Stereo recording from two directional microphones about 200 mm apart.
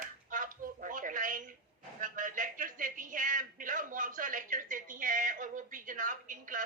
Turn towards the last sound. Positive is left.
turn(degrees=-40)  # may be behind; listen again after turning